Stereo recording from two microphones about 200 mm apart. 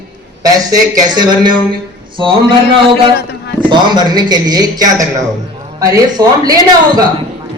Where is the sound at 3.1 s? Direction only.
55° left (ahead or behind).